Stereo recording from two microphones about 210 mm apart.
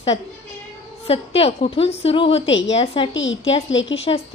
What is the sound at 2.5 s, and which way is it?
A woman's voice, 60° left (ahead or behind).